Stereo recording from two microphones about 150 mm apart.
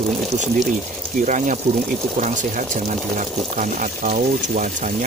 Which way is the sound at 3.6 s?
60° right (ahead or behind).